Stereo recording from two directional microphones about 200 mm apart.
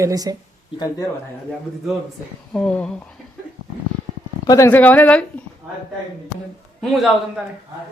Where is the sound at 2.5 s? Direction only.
5° left (ahead or behind).